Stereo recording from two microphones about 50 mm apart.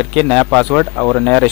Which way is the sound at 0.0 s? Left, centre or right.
Centre.